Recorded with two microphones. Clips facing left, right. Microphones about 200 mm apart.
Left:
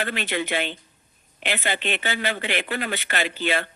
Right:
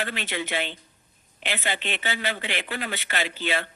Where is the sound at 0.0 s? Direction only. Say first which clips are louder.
Left 4 dB; 55° left (ahead or behind).